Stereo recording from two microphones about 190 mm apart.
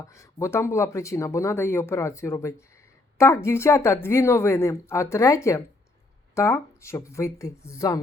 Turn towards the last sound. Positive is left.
turn(degrees=15)  # may be behind; listen again after turning